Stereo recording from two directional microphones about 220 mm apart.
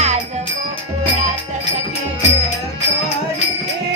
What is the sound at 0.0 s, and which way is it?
Music, 30° right (ahead or behind).